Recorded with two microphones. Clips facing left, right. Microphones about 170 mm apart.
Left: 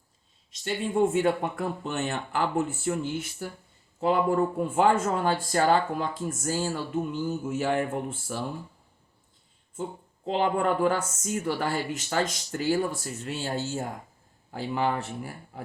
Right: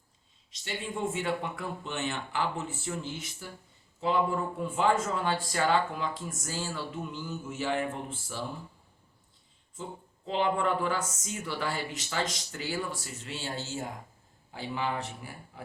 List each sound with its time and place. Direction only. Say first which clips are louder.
0.6 s speech: left 9 dB; 50° left (ahead or behind)
10.2 s speech: left 3 dB; 45° left (ahead or behind)